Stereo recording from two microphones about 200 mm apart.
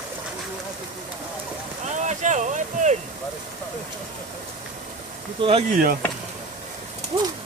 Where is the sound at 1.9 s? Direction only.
35° right (ahead or behind).